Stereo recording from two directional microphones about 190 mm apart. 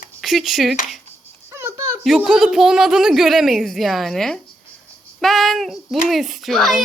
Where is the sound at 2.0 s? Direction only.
5° right (ahead or behind).